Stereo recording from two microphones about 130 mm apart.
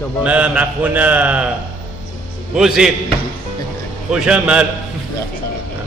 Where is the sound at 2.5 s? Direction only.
5° right (ahead or behind).